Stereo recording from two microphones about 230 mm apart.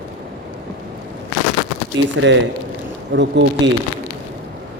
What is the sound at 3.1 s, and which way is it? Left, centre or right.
Speech, right.